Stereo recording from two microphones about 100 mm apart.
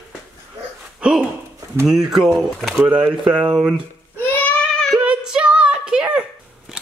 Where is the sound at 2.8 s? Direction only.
10° right (ahead or behind).